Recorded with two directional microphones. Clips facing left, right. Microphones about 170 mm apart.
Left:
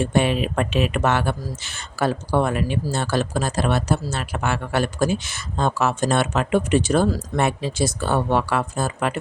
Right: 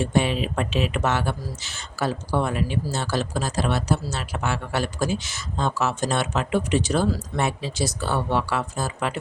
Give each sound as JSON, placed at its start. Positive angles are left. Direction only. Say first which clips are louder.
{"t": 0.0, "sound": "speech", "louder": "left 3 dB", "side_deg": 60}